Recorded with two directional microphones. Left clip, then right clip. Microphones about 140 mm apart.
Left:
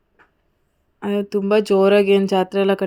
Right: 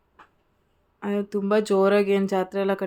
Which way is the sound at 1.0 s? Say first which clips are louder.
Left 6 dB; 35° left (ahead or behind).